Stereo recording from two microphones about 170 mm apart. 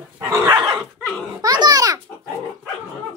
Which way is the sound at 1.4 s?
25° right (ahead or behind).